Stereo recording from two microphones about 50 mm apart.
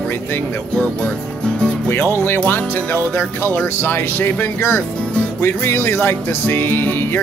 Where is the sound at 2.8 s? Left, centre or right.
Left.